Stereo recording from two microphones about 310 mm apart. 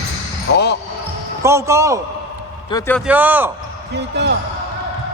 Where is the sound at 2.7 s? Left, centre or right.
Centre.